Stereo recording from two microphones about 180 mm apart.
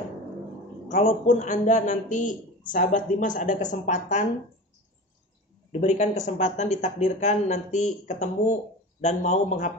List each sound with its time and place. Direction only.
0.8 s speech: 40° left (ahead or behind)
5.7 s speech: 40° left (ahead or behind)